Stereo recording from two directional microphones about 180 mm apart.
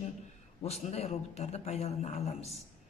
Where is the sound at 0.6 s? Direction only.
35° left (ahead or behind).